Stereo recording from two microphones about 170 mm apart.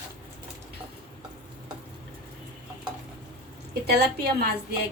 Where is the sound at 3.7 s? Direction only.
70° right (ahead or behind).